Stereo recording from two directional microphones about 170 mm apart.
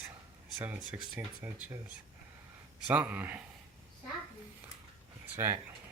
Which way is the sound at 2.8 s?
10° right (ahead or behind).